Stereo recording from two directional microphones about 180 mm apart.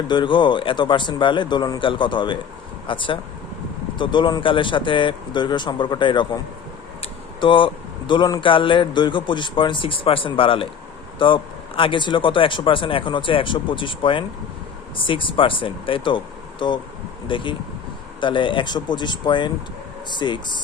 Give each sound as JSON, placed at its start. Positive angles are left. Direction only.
{"t": 0.1, "sound": "a man's voice", "side_deg": 25}
{"t": 7.4, "sound": "a man's voice", "side_deg": 25}